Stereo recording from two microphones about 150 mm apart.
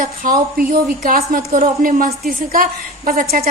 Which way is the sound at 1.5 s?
60° right (ahead or behind).